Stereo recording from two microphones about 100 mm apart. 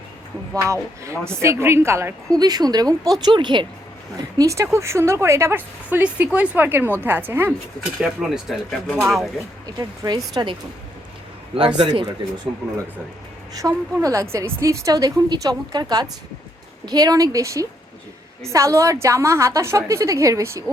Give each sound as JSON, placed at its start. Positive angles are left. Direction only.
{"t": 0.5, "sound": "a woman's voice", "side_deg": -30}
{"t": 2.4, "sound": "a woman's voice", "side_deg": -40}
{"t": 3.2, "sound": "speech", "side_deg": -50}
{"t": 4.4, "sound": "a woman's voice", "side_deg": -30}
{"t": 8.0, "sound": "speech", "side_deg": -5}
{"t": 9.7, "sound": "a woman's voice", "side_deg": -40}
{"t": 11.5, "sound": "a man's voice", "side_deg": -70}
{"t": 13.5, "sound": "a woman's voice", "side_deg": -35}